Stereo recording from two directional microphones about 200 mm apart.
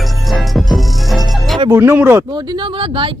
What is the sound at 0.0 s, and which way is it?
Music, centre (ahead or behind).